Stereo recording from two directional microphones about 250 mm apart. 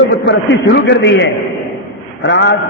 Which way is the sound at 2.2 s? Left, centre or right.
Left.